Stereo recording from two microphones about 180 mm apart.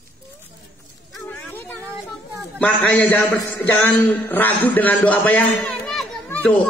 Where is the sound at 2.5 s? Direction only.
10° left (ahead or behind).